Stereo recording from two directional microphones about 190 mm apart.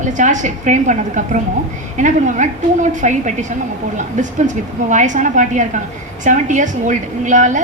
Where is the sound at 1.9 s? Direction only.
40° right (ahead or behind).